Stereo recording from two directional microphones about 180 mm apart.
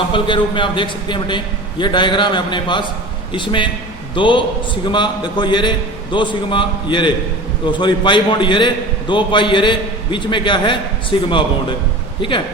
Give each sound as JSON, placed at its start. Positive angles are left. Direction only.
{"t": 0.1, "sound": "a man's voice", "side_deg": 25}